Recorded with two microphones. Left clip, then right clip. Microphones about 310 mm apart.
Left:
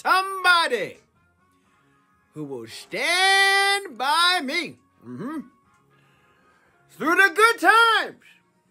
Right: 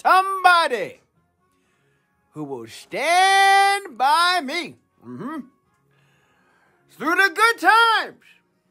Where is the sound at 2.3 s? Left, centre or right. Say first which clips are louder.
Right 2 dB; centre.